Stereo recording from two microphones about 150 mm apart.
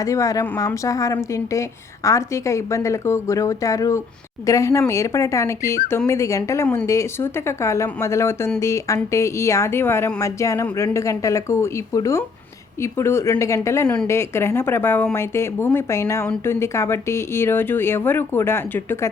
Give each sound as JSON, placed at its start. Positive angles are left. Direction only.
{"t": 0.0, "sound": "speech", "side_deg": 20}
{"t": 13.8, "sound": "speech", "side_deg": 5}